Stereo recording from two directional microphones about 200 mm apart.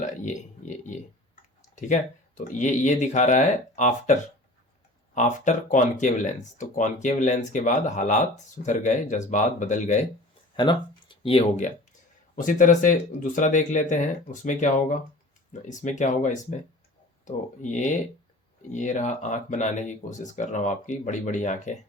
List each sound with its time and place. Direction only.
0.0 s a sound: 40° left (ahead or behind)
1.7 s speech: 35° left (ahead or behind)
10.6 s speech: 25° left (ahead or behind)